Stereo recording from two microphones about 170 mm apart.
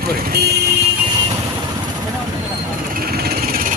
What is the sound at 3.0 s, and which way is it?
Vehicle, 65° right (ahead or behind).